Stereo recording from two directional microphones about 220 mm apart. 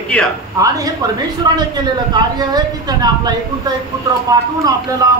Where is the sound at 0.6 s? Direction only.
15° right (ahead or behind).